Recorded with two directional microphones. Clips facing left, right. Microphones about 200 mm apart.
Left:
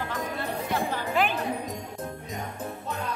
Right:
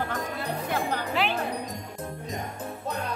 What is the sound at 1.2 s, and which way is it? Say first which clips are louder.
Music: left 3 dB; 45° left (ahead or behind).